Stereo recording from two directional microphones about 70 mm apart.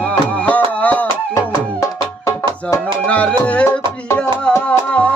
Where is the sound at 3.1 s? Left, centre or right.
Left.